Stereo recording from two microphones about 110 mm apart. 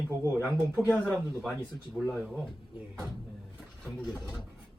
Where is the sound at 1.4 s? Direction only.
Centre (ahead or behind).